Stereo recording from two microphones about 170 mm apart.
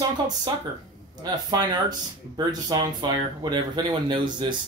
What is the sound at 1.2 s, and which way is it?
Speech, 25° right (ahead or behind).